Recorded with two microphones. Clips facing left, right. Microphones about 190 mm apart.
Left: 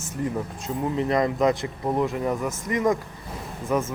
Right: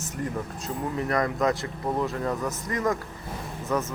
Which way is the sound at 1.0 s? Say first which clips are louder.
Left 3 dB; 20° left (ahead or behind).